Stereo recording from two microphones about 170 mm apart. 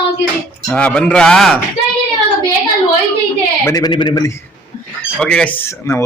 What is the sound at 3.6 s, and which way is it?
Speech, 20° left (ahead or behind).